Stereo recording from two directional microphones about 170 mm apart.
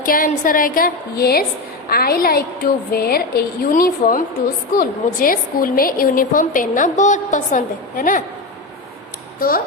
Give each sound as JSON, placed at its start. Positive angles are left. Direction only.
{"t": 0.0, "sound": "a woman's voice", "side_deg": 55}